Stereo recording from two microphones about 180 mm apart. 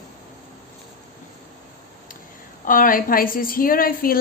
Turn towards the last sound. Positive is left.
turn(degrees=55)  # may be behind; listen again after turning